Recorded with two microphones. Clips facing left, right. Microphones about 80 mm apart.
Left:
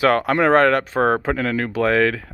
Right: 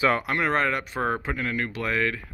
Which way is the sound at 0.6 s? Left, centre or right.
Left.